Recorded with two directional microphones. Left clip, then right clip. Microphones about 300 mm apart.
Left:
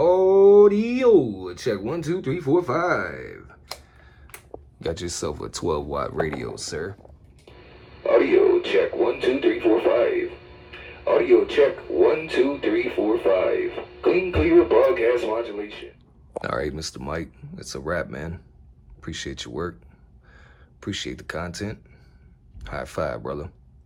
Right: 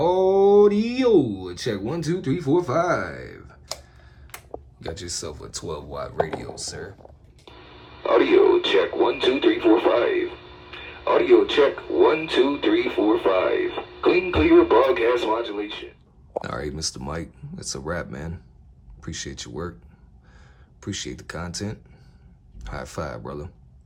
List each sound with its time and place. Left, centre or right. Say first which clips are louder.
0.0 s a sound: left 2 dB; centre
4.8 s speech: left 5 dB; centre
7.7 s speech: left 1 dB; centre
20.8 s speech: left 2 dB; centre